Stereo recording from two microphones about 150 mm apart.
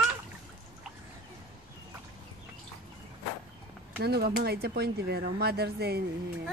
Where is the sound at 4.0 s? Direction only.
90° right.